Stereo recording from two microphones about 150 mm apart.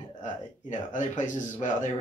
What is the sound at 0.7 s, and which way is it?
Speech, 55° left (ahead or behind).